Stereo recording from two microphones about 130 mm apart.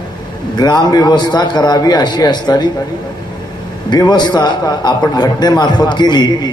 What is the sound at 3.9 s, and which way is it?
A man's voice, 35° left (ahead or behind).